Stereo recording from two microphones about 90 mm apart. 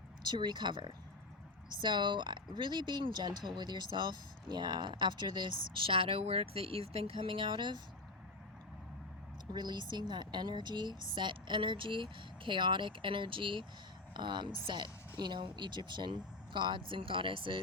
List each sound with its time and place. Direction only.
0.3 s speech: 55° right (ahead or behind)
9.5 s speech: 55° right (ahead or behind)